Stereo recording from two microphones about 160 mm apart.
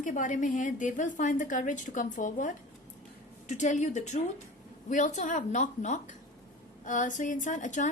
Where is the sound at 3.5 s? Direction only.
50° left (ahead or behind).